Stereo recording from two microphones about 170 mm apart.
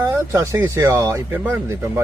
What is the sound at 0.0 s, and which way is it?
Speech, 15° right (ahead or behind).